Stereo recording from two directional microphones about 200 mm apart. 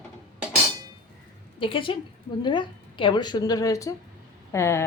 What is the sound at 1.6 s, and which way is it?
A woman's voice, 25° left (ahead or behind).